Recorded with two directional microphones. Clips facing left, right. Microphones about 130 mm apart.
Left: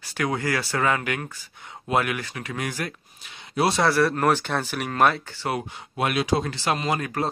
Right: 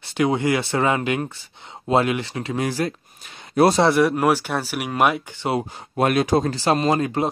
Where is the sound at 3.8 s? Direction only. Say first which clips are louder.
Right 4 dB; 20° right (ahead or behind).